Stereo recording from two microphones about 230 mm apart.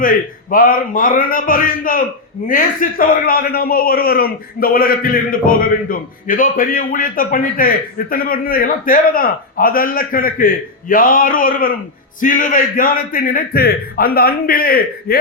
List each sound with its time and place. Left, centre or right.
0.0 s a man's voice: left